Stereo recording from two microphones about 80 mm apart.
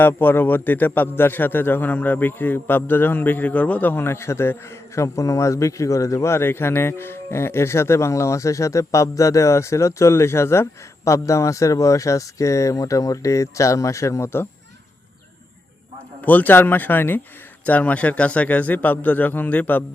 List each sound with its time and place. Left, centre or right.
0.0 s a man's voice: left
16.2 s a man's voice: left